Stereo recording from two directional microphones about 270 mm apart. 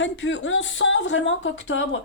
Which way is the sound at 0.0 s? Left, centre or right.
Left.